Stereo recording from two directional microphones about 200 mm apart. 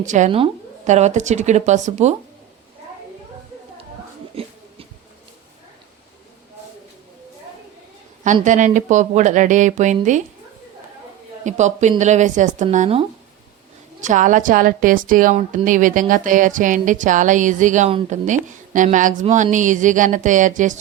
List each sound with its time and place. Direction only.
0.0 s a woman's voice: 40° right (ahead or behind)
4.4 s a sound: 30° right (ahead or behind)
8.4 s a woman's voice: 40° right (ahead or behind)
11.4 s a woman's voice: 35° right (ahead or behind)